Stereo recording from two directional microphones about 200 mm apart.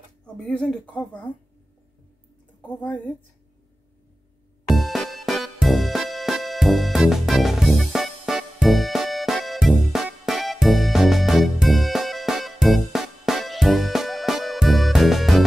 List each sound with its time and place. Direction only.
0.5 s speech: 5° left (ahead or behind)
2.7 s speech: 5° left (ahead or behind)
4.6 s music: centre (ahead or behind)